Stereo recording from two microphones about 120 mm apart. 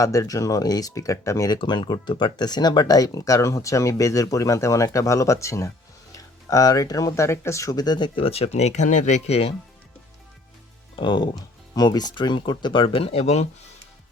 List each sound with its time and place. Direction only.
0.0 s speech: 25° left (ahead or behind)
1.5 s speech: 40° left (ahead or behind)
10.9 s speech: 40° left (ahead or behind); by 13.5 s 65° left (ahead or behind)